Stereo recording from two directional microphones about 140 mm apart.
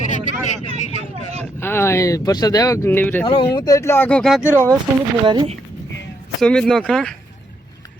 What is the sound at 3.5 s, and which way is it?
Speech, 25° left (ahead or behind).